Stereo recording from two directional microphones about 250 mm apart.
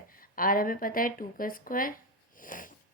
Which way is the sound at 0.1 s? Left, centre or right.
Left.